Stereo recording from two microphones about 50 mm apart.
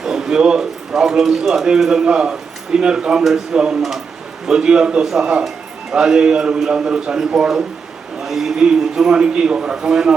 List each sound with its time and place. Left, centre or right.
0.0 s a man's voice: centre